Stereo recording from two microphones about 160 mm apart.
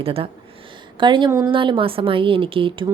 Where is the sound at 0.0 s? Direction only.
35° right (ahead or behind).